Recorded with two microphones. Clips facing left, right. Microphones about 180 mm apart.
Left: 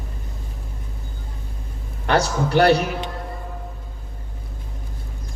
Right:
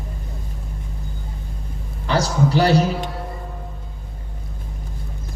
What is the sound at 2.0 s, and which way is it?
Speech, 60° left (ahead or behind).